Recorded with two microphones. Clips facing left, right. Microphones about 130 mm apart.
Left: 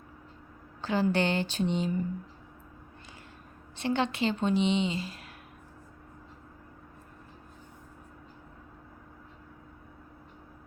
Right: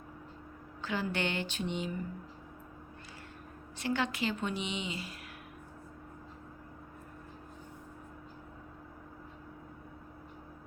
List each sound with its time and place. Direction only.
0.8 s speech: 30° left (ahead or behind)
3.8 s a woman's voice: 25° left (ahead or behind)